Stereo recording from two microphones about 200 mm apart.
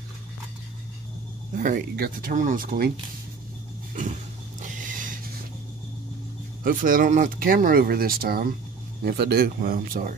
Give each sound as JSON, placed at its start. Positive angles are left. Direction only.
{"t": 1.5, "sound": "speech", "side_deg": -40}
{"t": 3.9, "sound": "a sound", "side_deg": -40}
{"t": 6.6, "sound": "speech", "side_deg": -45}